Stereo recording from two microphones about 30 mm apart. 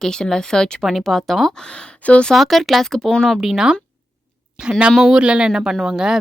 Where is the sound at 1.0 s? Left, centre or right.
Centre.